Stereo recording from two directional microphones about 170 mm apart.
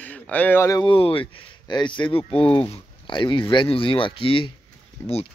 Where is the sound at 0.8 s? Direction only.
30° left (ahead or behind).